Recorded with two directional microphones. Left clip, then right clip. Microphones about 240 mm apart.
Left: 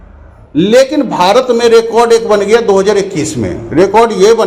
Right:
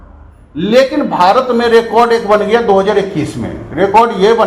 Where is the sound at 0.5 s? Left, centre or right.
Left.